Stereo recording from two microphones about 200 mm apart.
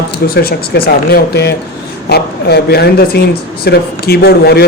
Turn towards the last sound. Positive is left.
turn(degrees=55)  # may be behind; listen again after turning